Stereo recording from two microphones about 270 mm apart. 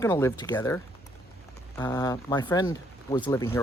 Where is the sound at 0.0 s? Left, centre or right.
Centre.